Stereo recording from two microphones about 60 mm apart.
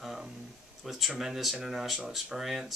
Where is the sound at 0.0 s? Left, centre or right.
Centre.